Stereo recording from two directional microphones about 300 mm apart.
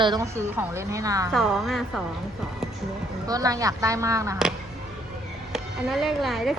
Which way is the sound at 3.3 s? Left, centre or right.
Centre.